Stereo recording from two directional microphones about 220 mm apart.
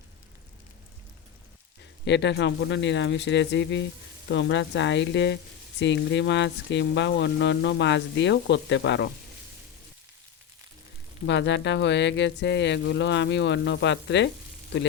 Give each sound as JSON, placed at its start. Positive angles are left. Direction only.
{"t": 2.0, "sound": "speech", "side_deg": 50}
{"t": 11.3, "sound": "speech", "side_deg": 55}